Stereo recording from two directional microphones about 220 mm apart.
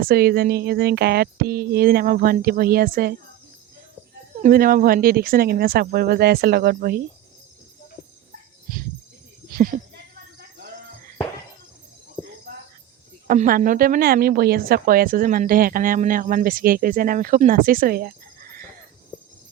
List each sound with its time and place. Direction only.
0.0 s speech: 45° right (ahead or behind)
4.4 s speech: 40° right (ahead or behind)
8.7 s cricket: 40° right (ahead or behind)
9.5 s speech: 40° right (ahead or behind)
13.2 s speech: 35° right (ahead or behind)